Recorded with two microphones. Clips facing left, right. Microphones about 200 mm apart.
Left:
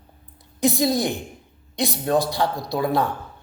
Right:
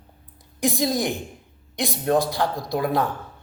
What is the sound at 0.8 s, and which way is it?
Speech, 15° right (ahead or behind).